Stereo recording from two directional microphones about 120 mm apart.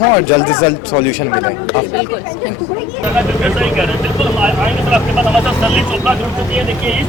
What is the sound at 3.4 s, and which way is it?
Speech, 5° right (ahead or behind).